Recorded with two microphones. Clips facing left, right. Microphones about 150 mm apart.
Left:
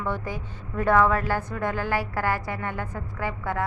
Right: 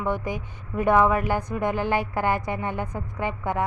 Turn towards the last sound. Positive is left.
turn(degrees=-20)  # may be behind; listen again after turning